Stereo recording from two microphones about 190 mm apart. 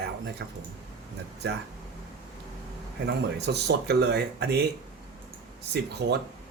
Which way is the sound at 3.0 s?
60° right (ahead or behind).